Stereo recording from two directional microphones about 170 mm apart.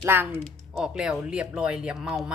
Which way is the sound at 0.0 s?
10° right (ahead or behind).